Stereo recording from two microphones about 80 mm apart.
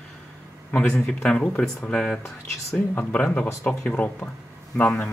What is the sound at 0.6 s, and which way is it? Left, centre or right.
Speech, centre.